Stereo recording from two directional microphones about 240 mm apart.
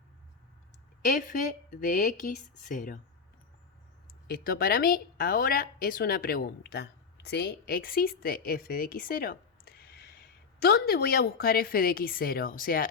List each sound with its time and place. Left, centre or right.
1.0 s a woman's voice: left
4.3 s a woman's voice: left